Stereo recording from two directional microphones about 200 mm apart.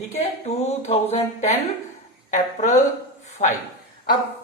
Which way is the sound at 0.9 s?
30° left (ahead or behind).